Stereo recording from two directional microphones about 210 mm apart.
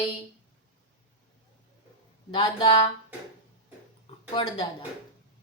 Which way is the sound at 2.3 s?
20° left (ahead or behind).